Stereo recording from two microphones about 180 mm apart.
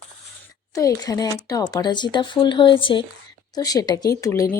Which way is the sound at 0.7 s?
20° left (ahead or behind).